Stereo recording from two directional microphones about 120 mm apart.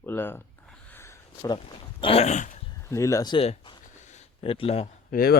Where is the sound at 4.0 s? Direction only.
80° left.